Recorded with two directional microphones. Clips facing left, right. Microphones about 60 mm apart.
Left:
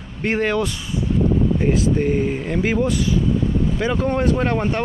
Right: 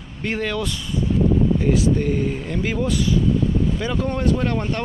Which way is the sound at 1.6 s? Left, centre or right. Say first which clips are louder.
Left 1 dB; left.